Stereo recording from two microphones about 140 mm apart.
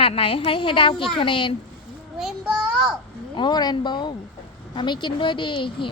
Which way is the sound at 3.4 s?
30° left (ahead or behind).